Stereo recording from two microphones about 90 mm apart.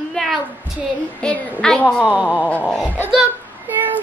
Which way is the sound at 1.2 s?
10° left (ahead or behind).